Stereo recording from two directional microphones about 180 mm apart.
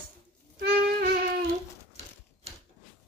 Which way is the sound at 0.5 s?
55° right (ahead or behind).